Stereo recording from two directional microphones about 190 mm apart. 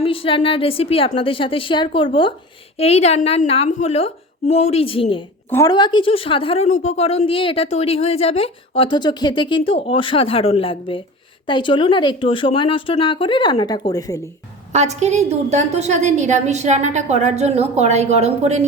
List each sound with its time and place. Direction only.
0.0 s speech: 30° left (ahead or behind)
5.5 s speech: 15° left (ahead or behind)
14.7 s a woman's voice: 35° right (ahead or behind)